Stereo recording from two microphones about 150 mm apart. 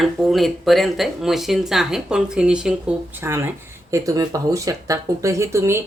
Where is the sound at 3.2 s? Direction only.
15° right (ahead or behind).